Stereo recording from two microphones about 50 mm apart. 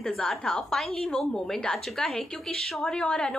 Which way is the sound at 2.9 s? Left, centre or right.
Centre.